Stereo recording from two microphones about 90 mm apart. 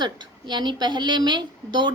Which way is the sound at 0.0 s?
55° right (ahead or behind).